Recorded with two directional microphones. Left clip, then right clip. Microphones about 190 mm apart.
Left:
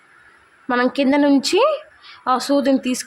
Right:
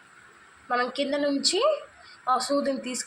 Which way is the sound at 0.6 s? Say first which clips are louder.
Left 8 dB; 40° left (ahead or behind).